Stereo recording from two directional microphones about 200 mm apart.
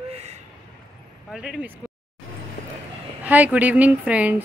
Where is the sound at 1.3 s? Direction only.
5° right (ahead or behind).